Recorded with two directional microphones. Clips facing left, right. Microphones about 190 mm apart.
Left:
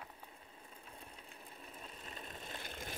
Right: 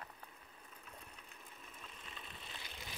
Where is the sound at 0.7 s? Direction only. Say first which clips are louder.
Left 2 dB; 30° left (ahead or behind); by 2.9 s 50° left (ahead or behind).